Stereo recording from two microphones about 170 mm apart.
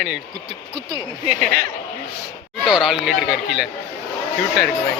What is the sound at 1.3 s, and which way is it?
Speech, 50° right (ahead or behind).